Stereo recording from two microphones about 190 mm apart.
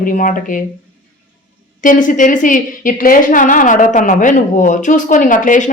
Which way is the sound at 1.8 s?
45° left (ahead or behind).